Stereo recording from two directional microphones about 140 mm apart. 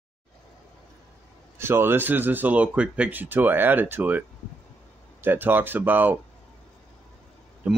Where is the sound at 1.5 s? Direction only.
15° right (ahead or behind).